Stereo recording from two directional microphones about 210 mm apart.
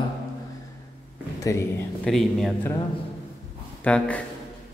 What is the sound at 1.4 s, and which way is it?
Speech, 15° left (ahead or behind).